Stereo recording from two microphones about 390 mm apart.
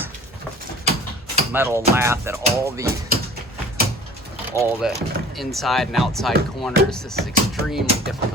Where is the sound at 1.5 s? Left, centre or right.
Centre.